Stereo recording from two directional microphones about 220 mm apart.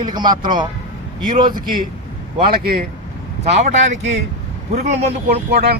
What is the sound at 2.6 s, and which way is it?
Speech, 45° right (ahead or behind).